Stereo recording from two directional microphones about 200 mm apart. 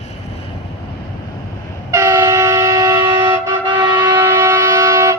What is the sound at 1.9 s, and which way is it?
Train, 15° right (ahead or behind).